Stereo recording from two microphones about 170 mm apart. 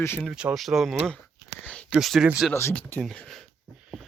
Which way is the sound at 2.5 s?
15° left (ahead or behind).